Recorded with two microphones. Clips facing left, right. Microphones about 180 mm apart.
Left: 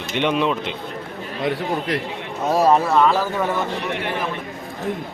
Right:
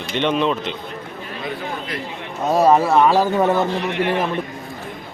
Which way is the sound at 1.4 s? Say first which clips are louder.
Left 6 dB; 70° left (ahead or behind).